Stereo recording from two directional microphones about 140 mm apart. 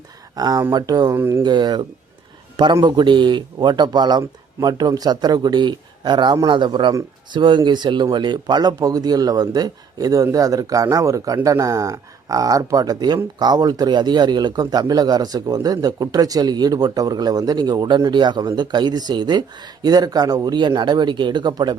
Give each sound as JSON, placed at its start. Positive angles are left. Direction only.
{"t": 0.3, "sound": "speech", "side_deg": -30}
{"t": 2.8, "sound": "speech", "side_deg": -35}